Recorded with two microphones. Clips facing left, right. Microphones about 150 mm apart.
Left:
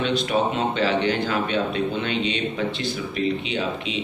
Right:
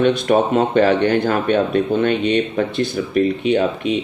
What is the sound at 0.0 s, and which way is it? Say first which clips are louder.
Speech: right 7 dB; 55° right (ahead or behind).